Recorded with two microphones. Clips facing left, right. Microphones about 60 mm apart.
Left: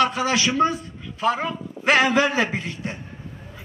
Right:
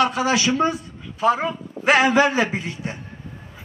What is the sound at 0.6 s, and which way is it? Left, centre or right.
A man's voice, centre.